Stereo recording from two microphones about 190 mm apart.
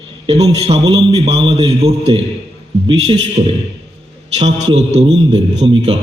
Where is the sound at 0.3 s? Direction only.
30° right (ahead or behind).